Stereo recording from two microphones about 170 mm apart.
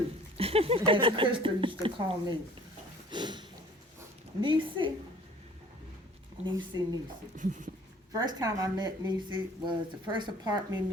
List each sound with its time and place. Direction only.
0.3 s speech: 35° right (ahead or behind)
3.1 s a sound: 25° right (ahead or behind)
4.4 s speech: 30° right (ahead or behind)
6.4 s speech: 25° right (ahead or behind)
7.3 s a sound: 50° right (ahead or behind)
8.1 s speech: 25° right (ahead or behind)